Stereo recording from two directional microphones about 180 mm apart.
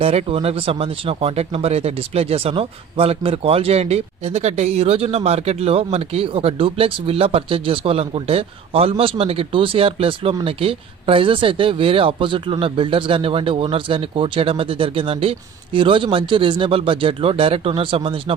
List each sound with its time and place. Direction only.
0.0 s speech: 35° right (ahead or behind)